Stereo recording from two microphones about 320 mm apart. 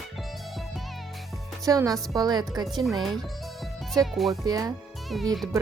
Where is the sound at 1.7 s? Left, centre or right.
Centre.